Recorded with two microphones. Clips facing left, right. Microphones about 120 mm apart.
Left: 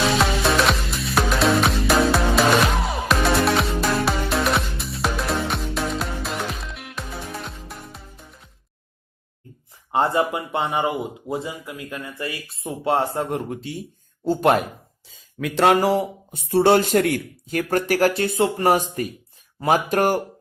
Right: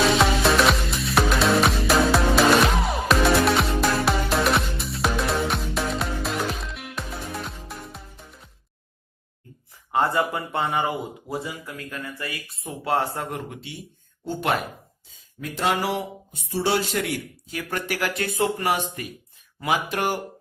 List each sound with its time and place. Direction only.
0.2 s music: centre (ahead or behind)
9.9 s speech: 25° left (ahead or behind)
13.5 s speech: 40° left (ahead or behind)
15.1 s a sound: 90° left
15.7 s speech: 40° left (ahead or behind)
16.5 s speech: 55° left (ahead or behind)